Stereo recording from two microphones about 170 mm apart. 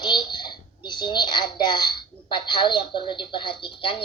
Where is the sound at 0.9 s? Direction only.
25° left (ahead or behind).